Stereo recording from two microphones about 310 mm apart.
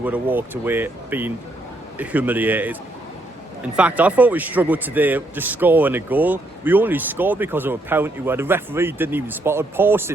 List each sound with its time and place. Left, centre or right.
0.0 s speech: centre
3.8 s a man's voice: centre